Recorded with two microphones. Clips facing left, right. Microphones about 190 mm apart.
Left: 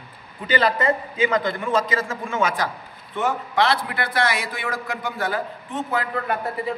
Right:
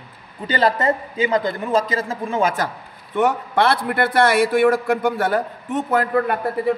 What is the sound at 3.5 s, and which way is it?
A man's voice, 55° right (ahead or behind).